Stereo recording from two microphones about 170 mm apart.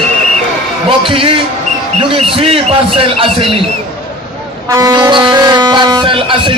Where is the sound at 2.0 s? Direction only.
30° right (ahead or behind).